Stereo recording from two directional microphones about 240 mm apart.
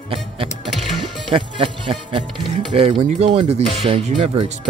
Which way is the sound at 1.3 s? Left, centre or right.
Right.